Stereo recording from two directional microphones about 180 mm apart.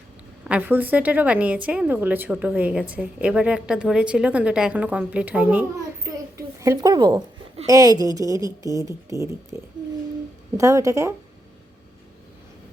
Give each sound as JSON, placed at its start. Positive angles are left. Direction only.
{"t": 0.4, "sound": "a woman's voice", "side_deg": -10}
{"t": 10.6, "sound": "a woman's voice", "side_deg": -15}